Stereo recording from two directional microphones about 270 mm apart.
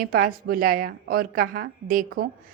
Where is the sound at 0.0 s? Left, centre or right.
Right.